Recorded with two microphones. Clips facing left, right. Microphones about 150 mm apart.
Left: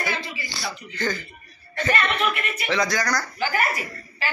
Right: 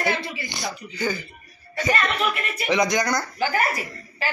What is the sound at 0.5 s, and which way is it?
A man's voice, 20° right (ahead or behind).